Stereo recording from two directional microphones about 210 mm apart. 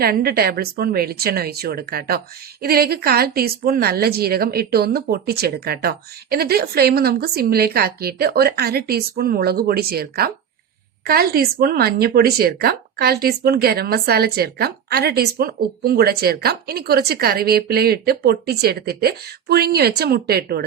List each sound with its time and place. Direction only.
0.0 s speech: 45° right (ahead or behind)